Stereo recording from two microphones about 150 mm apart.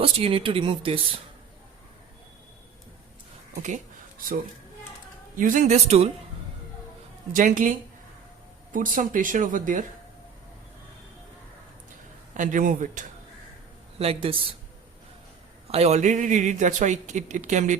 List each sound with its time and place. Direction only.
0.0 s speech: 40° right (ahead or behind)
3.5 s speech: 55° right (ahead or behind)
5.4 s a man's voice: 60° right (ahead or behind)
7.3 s speech: 60° right (ahead or behind)
12.3 s speech: 55° right (ahead or behind)
14.0 s speech: 40° right (ahead or behind)
15.6 s a man's voice: 45° right (ahead or behind)